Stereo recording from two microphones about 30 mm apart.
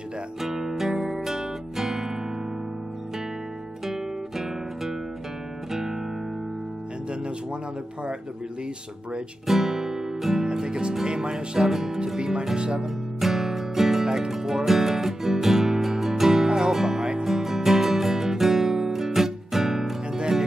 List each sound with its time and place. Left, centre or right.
0.4 s music: centre
3.8 s guitar: centre
9.5 s music: centre
10.5 s music: right
12.5 s speech: right
12.8 s music: centre
20.1 s music: right